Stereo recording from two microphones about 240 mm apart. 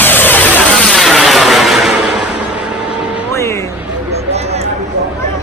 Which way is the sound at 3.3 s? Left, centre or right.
Centre.